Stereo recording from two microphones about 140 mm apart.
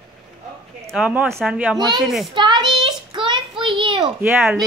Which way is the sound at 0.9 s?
5° right (ahead or behind).